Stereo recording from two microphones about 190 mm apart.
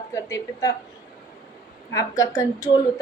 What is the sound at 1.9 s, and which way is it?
Speech, 20° left (ahead or behind).